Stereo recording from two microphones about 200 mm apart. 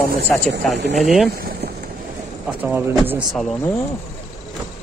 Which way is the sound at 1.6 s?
55° right (ahead or behind).